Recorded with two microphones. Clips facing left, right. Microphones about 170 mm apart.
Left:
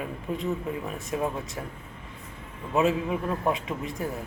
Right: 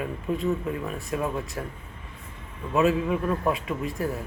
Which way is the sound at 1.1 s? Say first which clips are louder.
Even; 25° left (ahead or behind).